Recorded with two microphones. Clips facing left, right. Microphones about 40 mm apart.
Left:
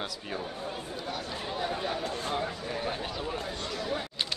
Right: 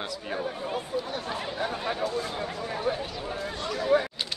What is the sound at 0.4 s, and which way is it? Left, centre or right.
Speech, right.